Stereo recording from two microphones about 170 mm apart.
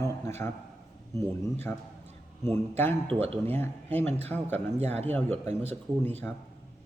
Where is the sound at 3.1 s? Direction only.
35° right (ahead or behind).